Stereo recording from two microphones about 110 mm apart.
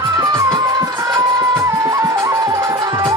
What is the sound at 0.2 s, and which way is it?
Music, 35° right (ahead or behind).